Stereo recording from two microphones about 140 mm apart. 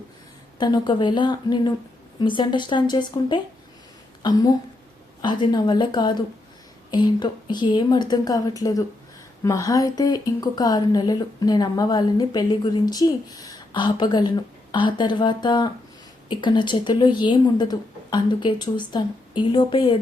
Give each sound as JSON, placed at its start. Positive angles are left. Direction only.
{"t": 0.6, "sound": "a woman's voice", "side_deg": 30}